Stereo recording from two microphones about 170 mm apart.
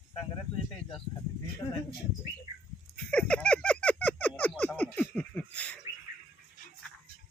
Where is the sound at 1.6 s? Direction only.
20° left (ahead or behind).